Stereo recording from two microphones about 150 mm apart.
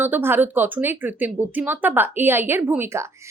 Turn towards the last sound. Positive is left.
turn(degrees=-15)  # may be behind; listen again after turning